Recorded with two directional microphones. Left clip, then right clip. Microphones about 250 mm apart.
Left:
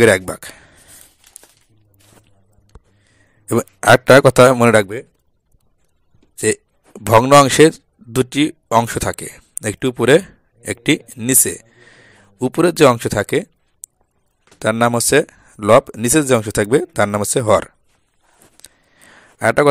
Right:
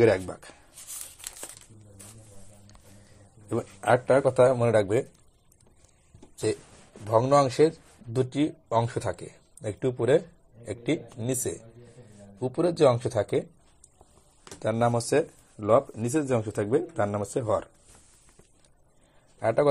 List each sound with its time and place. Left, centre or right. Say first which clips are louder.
0.0 s speech: left 10 dB; left
3.4 s speech: left 13 dB; left
7.1 s speech: left 12 dB; left
14.6 s speech: left 10 dB; left
19.4 s speech: left 10 dB; left